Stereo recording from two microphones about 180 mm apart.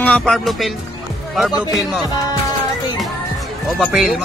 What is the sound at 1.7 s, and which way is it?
Speech, centre (ahead or behind).